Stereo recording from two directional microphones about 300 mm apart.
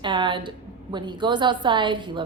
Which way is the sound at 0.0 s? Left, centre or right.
Centre.